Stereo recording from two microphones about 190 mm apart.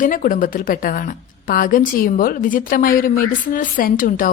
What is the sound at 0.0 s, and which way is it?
A woman's voice, 45° left (ahead or behind).